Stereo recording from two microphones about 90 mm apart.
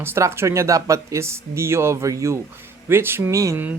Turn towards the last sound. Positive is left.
turn(degrees=-35)  # may be behind; listen again after turning